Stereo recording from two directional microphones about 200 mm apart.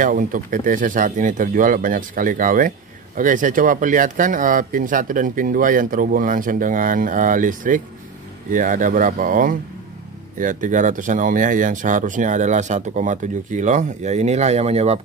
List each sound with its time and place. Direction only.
0.0 s speech: 45° right (ahead or behind)